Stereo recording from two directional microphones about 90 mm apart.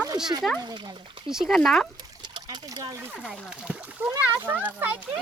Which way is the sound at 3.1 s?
10° right (ahead or behind).